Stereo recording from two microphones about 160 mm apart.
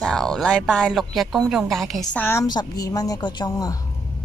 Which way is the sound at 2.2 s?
15° left (ahead or behind).